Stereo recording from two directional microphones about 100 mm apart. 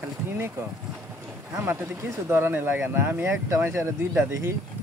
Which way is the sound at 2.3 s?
20° right (ahead or behind).